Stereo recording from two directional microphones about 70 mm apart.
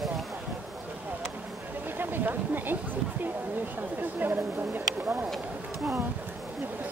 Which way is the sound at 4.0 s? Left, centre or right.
Right.